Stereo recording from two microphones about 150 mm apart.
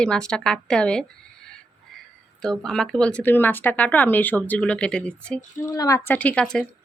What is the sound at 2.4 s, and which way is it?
Speech, 5° left (ahead or behind).